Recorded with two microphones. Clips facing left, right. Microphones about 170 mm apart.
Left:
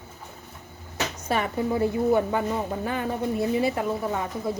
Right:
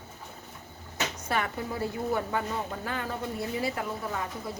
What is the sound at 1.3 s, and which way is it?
A woman's voice, 20° left (ahead or behind).